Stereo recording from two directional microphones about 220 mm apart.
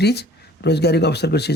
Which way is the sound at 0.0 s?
50° left (ahead or behind).